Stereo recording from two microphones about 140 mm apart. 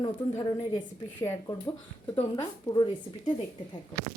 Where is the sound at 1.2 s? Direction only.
30° left (ahead or behind).